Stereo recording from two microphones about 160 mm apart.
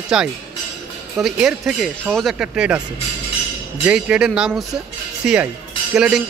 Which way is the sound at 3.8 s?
5° right (ahead or behind).